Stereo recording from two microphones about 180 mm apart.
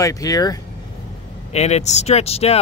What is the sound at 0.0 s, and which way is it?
Speech, 20° left (ahead or behind).